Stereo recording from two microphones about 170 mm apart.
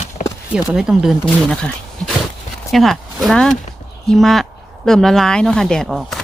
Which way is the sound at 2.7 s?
Centre (ahead or behind).